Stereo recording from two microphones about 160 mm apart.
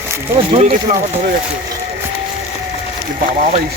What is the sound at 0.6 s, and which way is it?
Speech, 45° right (ahead or behind).